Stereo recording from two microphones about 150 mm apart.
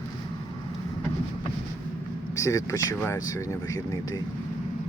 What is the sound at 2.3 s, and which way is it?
Speech, 20° left (ahead or behind).